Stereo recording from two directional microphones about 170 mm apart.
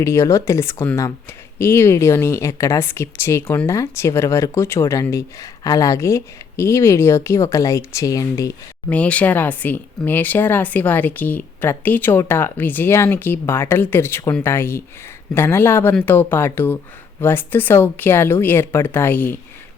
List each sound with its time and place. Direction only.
0.0 s speech: 15° left (ahead or behind)
8.9 s speech: 10° left (ahead or behind)